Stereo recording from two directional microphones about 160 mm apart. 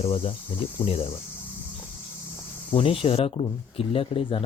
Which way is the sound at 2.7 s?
35° left (ahead or behind).